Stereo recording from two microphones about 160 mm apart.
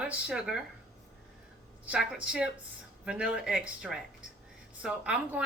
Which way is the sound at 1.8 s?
5° right (ahead or behind).